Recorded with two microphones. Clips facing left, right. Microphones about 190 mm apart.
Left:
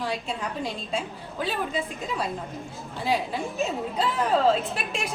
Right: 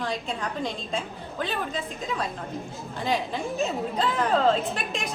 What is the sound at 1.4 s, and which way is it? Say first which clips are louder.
Speech: left 2 dB; 10° left (ahead or behind).